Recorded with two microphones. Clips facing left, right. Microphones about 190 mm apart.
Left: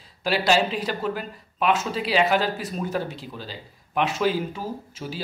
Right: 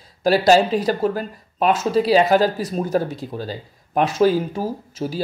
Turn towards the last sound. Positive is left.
turn(degrees=-40)  # may be behind; listen again after turning